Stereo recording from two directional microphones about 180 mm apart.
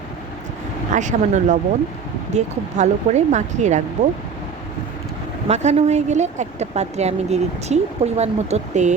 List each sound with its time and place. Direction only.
0.9 s a woman's voice: 45° right (ahead or behind)
5.5 s a woman's voice: 40° right (ahead or behind)